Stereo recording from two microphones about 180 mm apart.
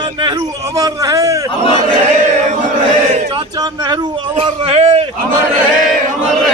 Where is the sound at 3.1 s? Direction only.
30° right (ahead or behind).